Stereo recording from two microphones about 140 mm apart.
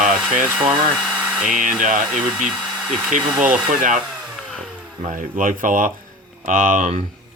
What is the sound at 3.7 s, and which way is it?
Speech, 65° right (ahead or behind).